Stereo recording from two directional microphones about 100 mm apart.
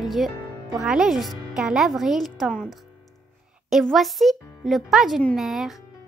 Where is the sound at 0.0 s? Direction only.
Centre (ahead or behind).